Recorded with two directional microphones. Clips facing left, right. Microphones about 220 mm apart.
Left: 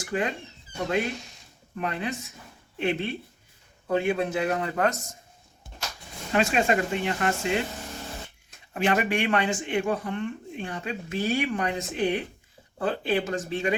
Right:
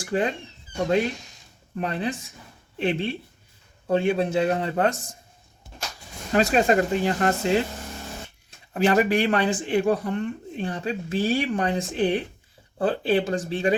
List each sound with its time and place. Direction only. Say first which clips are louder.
0.0 s speech: right 4 dB; 35° right (ahead or behind)
1.8 s speech: right 3 dB; 35° right (ahead or behind)
6.3 s speech: right 4 dB; 35° right (ahead or behind)